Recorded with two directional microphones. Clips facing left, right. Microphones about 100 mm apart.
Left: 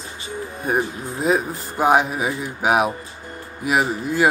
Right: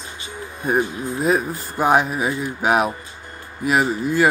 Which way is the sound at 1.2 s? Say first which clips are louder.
Even; 20° left (ahead or behind).